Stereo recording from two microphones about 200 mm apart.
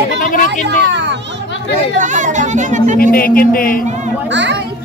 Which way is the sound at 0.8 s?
60° right (ahead or behind).